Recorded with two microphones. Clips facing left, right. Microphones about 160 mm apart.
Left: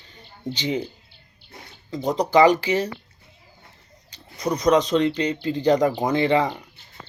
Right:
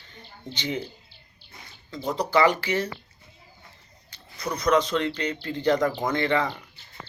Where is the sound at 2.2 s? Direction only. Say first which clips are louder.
Left 5 dB; 15° left (ahead or behind).